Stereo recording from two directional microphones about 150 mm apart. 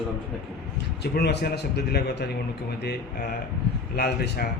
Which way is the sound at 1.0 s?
90° left.